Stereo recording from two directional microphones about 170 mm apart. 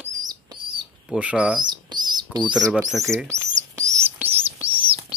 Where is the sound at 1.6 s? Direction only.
25° right (ahead or behind).